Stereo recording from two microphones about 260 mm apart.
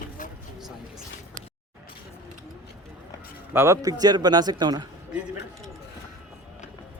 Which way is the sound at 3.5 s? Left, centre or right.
Centre.